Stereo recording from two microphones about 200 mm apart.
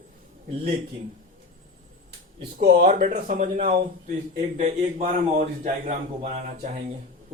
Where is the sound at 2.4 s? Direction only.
50° right (ahead or behind).